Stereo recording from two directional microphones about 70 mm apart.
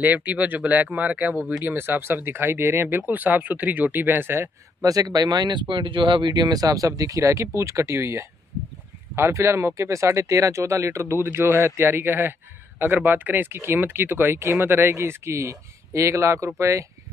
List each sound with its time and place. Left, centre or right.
0.0 s speech: right
4.8 s speech: right